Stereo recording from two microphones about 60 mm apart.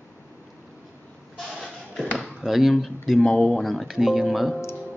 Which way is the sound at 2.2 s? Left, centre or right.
Centre.